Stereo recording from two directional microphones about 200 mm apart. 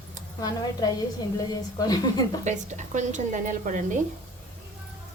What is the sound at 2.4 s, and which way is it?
Speech, 35° right (ahead or behind).